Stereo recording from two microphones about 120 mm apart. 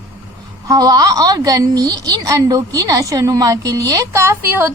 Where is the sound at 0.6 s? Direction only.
30° right (ahead or behind).